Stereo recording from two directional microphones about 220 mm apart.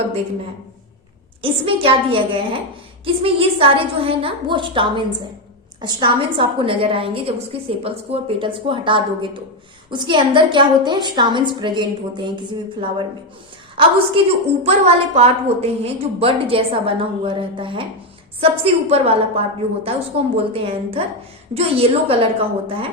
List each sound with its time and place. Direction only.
1.4 s a woman's voice: 25° right (ahead or behind)
13.8 s a woman's voice: 25° right (ahead or behind)